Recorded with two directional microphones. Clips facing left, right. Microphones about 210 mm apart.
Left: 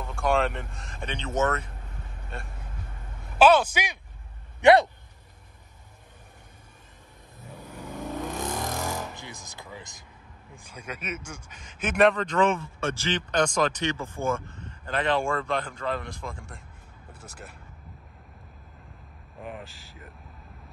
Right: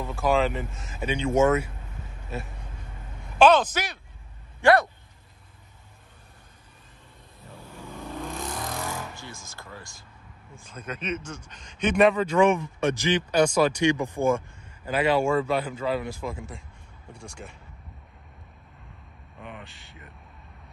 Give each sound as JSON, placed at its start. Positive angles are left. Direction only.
{"t": 0.0, "sound": "speech", "side_deg": -5}
{"t": 3.3, "sound": "a man's voice", "side_deg": 10}
{"t": 7.5, "sound": "vehicle", "side_deg": 15}
{"t": 9.1, "sound": "a man's voice", "side_deg": 20}
{"t": 19.4, "sound": "speech", "side_deg": 0}